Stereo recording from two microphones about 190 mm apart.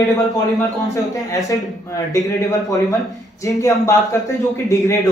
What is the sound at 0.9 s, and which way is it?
Speech, 15° left (ahead or behind).